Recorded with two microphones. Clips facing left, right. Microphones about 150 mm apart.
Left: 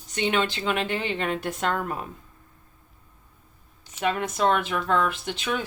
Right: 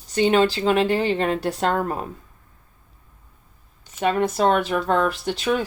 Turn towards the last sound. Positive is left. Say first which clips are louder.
# right 6 dB
turn(degrees=-40)  # may be behind; listen again after turning